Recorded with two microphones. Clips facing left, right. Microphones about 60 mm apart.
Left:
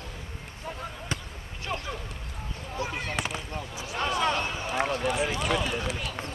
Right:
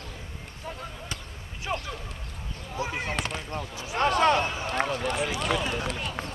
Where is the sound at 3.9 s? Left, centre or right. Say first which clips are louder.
Right 5 dB; right.